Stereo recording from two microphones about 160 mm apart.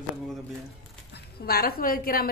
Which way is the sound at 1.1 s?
75° left (ahead or behind).